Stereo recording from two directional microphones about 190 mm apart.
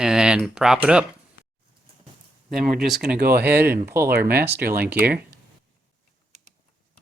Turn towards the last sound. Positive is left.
turn(degrees=-10)  # may be behind; listen again after turning